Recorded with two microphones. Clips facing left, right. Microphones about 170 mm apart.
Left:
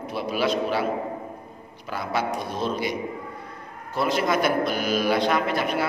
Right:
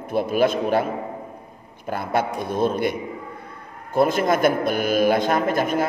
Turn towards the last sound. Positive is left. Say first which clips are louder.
# right 3 dB
turn(degrees=-45)  # may be behind; listen again after turning